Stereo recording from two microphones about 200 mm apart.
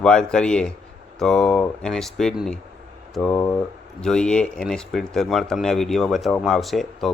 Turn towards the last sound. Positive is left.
turn(degrees=0)  # may be behind; listen again after turning